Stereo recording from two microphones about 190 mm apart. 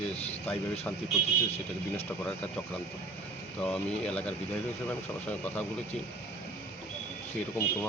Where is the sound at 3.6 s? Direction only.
5° left (ahead or behind).